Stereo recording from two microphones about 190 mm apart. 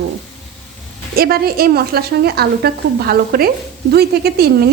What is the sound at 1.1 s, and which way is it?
A woman's voice, 50° right (ahead or behind).